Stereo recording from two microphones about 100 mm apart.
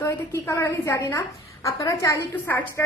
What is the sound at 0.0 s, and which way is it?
A woman's voice, 25° left (ahead or behind).